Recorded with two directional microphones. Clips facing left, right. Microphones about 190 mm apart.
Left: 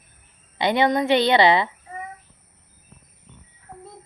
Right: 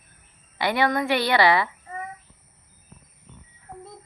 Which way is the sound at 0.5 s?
20° left (ahead or behind).